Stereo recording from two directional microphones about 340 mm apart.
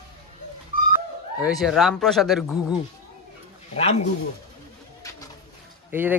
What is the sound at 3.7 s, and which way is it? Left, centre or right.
Speech, centre.